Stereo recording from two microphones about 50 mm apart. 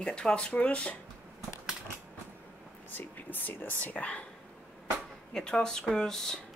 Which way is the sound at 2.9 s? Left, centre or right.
Left.